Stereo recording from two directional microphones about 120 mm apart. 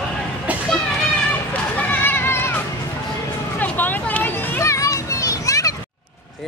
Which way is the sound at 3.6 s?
15° left (ahead or behind).